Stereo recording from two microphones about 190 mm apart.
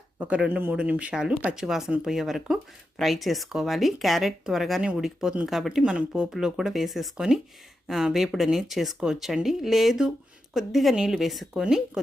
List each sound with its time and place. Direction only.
0.2 s speech: 5° right (ahead or behind)